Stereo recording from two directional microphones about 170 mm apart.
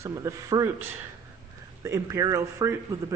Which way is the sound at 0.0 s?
20° right (ahead or behind).